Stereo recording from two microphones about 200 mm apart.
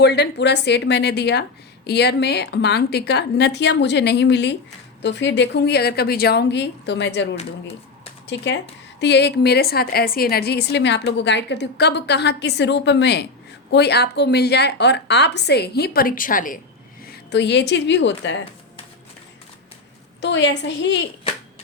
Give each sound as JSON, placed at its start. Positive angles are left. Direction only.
{"t": 0.0, "sound": "a woman's voice", "side_deg": 55}
{"t": 17.1, "sound": "a woman's voice", "side_deg": 60}
{"t": 20.2, "sound": "a woman's voice", "side_deg": 60}